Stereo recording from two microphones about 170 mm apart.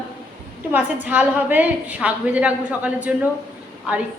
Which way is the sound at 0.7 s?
10° right (ahead or behind).